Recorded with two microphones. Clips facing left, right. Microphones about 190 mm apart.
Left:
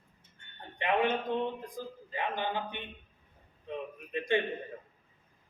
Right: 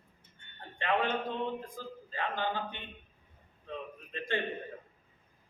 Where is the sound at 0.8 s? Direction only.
15° left (ahead or behind).